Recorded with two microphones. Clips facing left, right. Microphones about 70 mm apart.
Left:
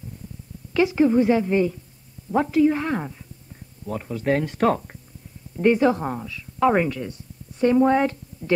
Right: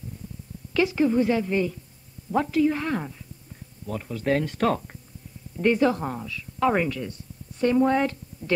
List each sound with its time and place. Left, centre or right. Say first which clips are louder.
0.7 s a woman's voice: left 3 dB; centre